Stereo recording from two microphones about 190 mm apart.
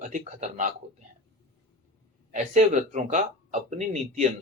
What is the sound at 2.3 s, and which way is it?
Speech, 40° right (ahead or behind).